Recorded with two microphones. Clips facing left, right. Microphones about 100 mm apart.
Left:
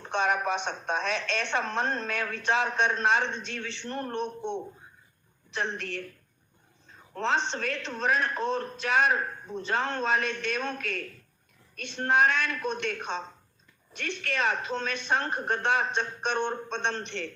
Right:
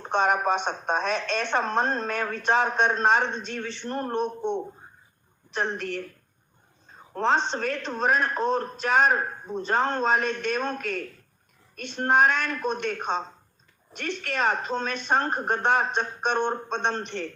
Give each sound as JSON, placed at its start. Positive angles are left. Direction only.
{"t": 0.0, "sound": "a man's voice", "side_deg": -45}
{"t": 5.5, "sound": "a man's voice", "side_deg": -45}
{"t": 7.2, "sound": "a man's voice", "side_deg": -45}